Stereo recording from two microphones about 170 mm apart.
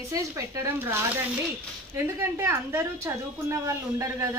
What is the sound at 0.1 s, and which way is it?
Speech, 15° right (ahead or behind).